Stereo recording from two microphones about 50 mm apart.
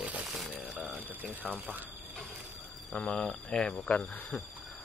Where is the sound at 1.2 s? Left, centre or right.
Right.